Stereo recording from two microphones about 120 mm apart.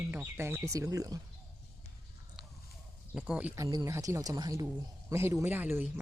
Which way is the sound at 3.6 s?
30° right (ahead or behind).